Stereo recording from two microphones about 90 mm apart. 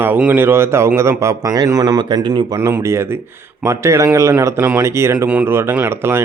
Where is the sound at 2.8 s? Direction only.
30° right (ahead or behind).